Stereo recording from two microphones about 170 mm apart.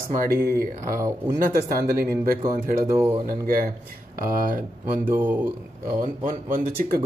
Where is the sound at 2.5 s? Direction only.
55° right (ahead or behind).